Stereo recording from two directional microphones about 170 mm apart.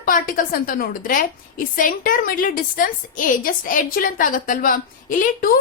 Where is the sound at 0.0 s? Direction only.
55° left (ahead or behind).